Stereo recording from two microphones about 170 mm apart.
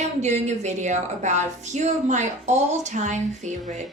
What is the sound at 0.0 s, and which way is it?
Speech, 40° right (ahead or behind).